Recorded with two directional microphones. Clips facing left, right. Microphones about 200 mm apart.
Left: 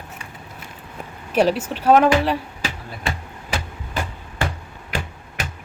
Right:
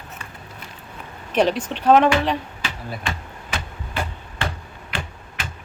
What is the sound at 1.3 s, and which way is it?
Speech, 5° left (ahead or behind).